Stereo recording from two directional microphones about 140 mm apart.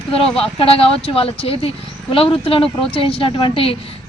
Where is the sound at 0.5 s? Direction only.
40° left (ahead or behind).